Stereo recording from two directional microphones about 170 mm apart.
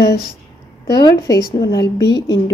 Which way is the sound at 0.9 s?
25° left (ahead or behind).